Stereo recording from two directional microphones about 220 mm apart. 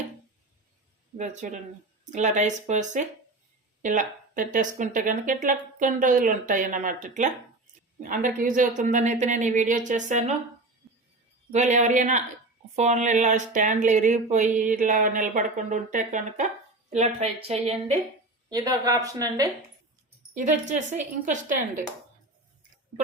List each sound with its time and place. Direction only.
1.1 s speech: 35° right (ahead or behind)
11.5 s a woman's voice: 30° right (ahead or behind)
18.4 s a woman's voice: 15° right (ahead or behind)
20.3 s speech: 35° right (ahead or behind)